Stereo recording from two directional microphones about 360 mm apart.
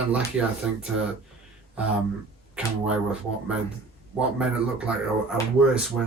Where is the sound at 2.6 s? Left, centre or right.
Centre.